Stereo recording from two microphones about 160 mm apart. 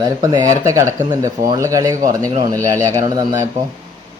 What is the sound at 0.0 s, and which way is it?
Speech, 25° right (ahead or behind).